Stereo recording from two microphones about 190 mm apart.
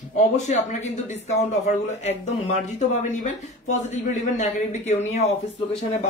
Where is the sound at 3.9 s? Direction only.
35° left (ahead or behind).